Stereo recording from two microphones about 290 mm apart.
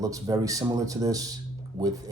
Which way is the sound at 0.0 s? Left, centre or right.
Centre.